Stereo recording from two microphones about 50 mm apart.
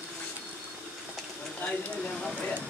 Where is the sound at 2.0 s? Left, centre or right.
Centre.